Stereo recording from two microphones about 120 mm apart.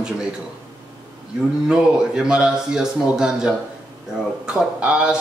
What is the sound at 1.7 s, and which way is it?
Speech, 5° right (ahead or behind).